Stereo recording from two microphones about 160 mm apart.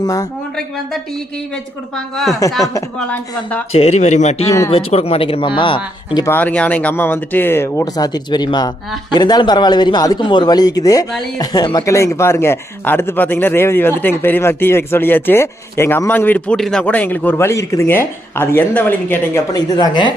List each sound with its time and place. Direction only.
0.0 s a man's voice: 20° left (ahead or behind)
2.1 s speech: centre (ahead or behind)
3.7 s speech: 40° left (ahead or behind)
6.2 s a man's voice: 10° left (ahead or behind)
19.5 s a man's voice: 25° left (ahead or behind)